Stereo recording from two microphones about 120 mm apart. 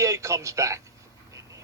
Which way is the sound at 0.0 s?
25° right (ahead or behind).